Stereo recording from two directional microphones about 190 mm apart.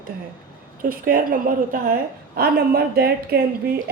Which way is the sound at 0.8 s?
50° right (ahead or behind).